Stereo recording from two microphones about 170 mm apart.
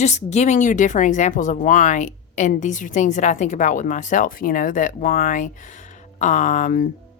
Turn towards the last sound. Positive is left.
turn(degrees=55)  # may be behind; listen again after turning